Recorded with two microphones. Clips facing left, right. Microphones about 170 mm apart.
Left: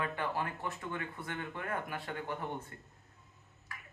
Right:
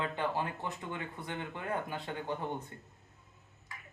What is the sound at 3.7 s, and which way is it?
Tick-tock, 20° right (ahead or behind).